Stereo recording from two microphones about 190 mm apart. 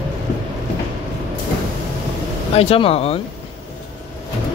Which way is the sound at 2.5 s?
30° left (ahead or behind).